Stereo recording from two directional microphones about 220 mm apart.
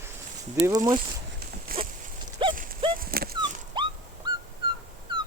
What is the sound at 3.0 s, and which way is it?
Dog, 40° right (ahead or behind).